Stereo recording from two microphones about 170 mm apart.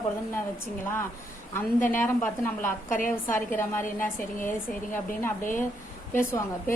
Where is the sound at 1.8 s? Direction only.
10° left (ahead or behind).